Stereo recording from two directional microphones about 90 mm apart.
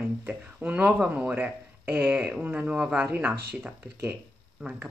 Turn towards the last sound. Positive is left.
turn(degrees=-20)  # may be behind; listen again after turning